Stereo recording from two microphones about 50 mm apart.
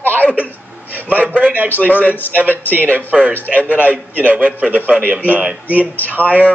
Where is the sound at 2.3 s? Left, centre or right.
Right.